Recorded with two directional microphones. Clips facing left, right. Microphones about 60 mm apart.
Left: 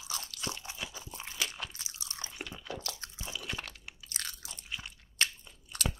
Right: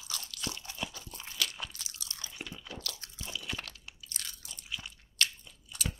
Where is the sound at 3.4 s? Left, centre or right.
Centre.